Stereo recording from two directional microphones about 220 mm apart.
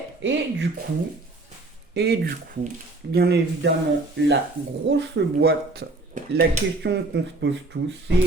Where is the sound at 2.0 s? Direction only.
50° right (ahead or behind).